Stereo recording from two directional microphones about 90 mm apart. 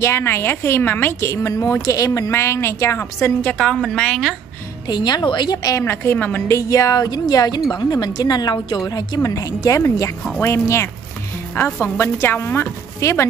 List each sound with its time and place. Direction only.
0.0 s a woman's voice: 30° left (ahead or behind)
3.5 s a woman's voice: 5° left (ahead or behind)
4.8 s speech: 50° left (ahead or behind)
5.9 s a woman's voice: 25° left (ahead or behind)
6.5 s a woman's voice: 40° left (ahead or behind)